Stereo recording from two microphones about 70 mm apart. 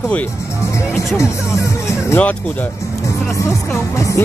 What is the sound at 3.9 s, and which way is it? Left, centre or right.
Music, left.